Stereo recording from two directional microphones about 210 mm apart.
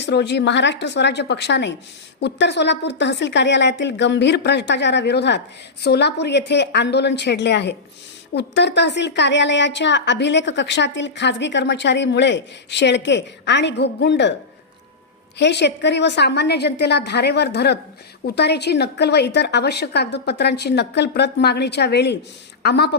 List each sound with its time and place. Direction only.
0.0 s a woman's voice: 55° left (ahead or behind)
15.4 s speech: 55° left (ahead or behind)